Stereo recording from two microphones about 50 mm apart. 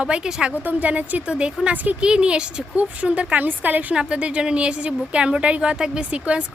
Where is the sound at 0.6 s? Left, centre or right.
Right.